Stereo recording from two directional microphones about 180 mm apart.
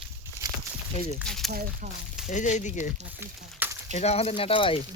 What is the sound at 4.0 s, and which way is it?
Speech, 35° left (ahead or behind).